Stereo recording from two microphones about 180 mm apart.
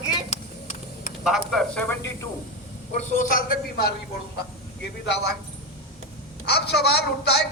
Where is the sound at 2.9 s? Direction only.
40° left (ahead or behind).